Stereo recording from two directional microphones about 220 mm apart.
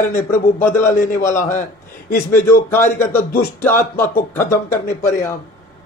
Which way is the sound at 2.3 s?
10° left (ahead or behind).